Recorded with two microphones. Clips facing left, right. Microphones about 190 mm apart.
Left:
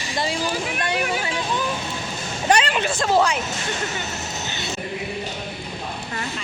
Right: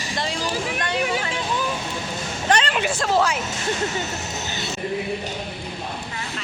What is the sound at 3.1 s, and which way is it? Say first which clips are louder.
Speech: left 2 dB; centre (ahead or behind).